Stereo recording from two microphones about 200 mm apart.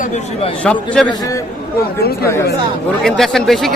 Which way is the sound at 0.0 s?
35° left (ahead or behind).